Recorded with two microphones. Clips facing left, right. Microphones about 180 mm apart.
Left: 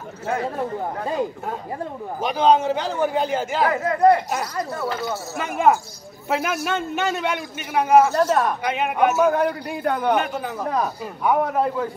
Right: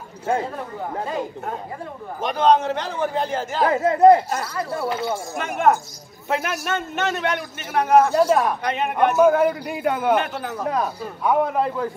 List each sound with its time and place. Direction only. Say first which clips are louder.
2.2 s a man's voice: even; 5° left (ahead or behind)
3.6 s speech: right 4 dB; 25° right (ahead or behind)
5.3 s a man's voice: left 1 dB; 5° left (ahead or behind)
8.1 s speech: right 2 dB; 10° right (ahead or behind)
8.6 s a man's voice: even; 5° left (ahead or behind)